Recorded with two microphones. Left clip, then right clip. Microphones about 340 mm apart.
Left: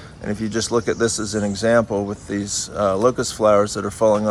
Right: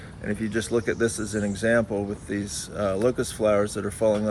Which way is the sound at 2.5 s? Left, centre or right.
Left.